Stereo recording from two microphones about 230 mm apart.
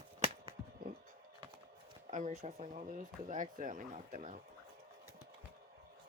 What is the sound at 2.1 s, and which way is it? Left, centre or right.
Speech, right.